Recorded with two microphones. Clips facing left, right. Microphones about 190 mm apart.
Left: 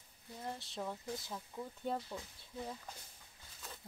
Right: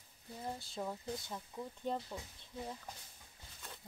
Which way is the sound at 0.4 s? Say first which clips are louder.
Right 1 dB; centre (ahead or behind).